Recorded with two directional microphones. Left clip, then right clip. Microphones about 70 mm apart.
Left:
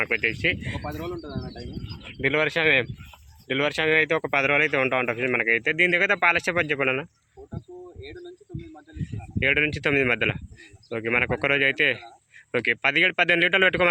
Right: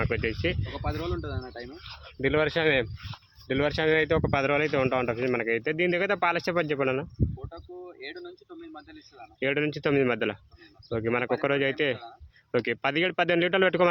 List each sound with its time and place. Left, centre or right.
0.0 s speech: right
2.0 s speech: right
9.4 s speech: right